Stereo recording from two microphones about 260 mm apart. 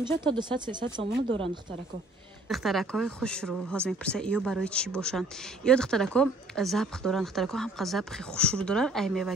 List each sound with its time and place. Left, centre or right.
0.2 s speech: centre
2.5 s speech: centre